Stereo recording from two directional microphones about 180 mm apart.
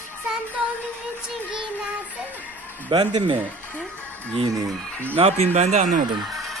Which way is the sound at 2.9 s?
25° right (ahead or behind).